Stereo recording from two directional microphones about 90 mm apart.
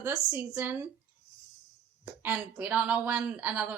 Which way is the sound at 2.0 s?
20° right (ahead or behind).